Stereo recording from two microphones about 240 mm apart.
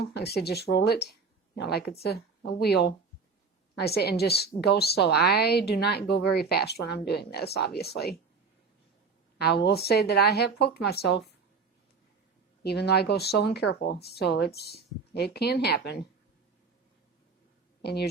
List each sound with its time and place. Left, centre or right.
0.0 s a woman's voice: left
9.4 s speech: left
12.6 s speech: left
17.8 s speech: left